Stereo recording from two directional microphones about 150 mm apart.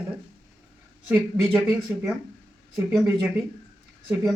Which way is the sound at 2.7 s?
Centre (ahead or behind).